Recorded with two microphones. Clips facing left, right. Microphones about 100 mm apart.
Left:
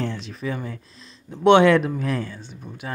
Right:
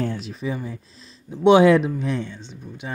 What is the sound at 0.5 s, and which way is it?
Speech, 5° right (ahead or behind).